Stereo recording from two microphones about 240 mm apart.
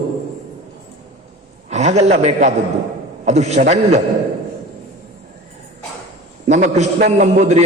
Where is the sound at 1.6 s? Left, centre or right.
Right.